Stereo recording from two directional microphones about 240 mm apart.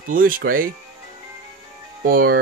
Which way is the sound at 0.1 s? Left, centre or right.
Right.